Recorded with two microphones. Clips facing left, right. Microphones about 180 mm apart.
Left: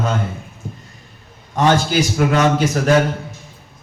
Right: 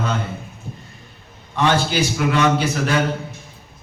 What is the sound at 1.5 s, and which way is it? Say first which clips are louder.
A man's voice: left 3 dB; 45° left (ahead or behind).